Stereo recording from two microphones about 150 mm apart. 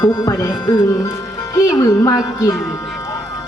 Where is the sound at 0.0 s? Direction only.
20° left (ahead or behind).